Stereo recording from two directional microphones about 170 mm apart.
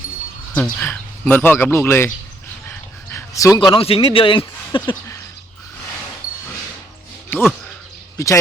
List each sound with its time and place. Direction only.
0.5 s speech: 10° left (ahead or behind)
2.6 s dog: 15° left (ahead or behind)
3.7 s speech: 35° left (ahead or behind)
7.3 s speech: 15° left (ahead or behind)